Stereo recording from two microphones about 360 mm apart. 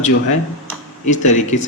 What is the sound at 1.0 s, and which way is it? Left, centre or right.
Speech, centre.